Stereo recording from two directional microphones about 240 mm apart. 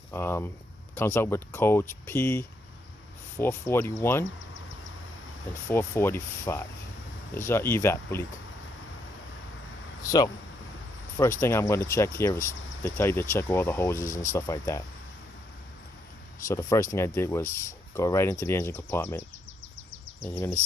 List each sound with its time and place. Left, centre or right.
0.1 s speech: centre
5.6 s speech: centre
10.0 s speech: centre
14.1 s speech: left
14.3 s speech: centre
16.5 s speech: centre
20.2 s speech: centre